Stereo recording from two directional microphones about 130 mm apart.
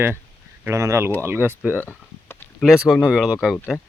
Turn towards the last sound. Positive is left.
turn(degrees=-5)  # may be behind; listen again after turning